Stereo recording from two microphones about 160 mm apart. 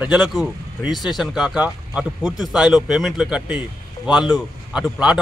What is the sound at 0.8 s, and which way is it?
Speech, 25° left (ahead or behind).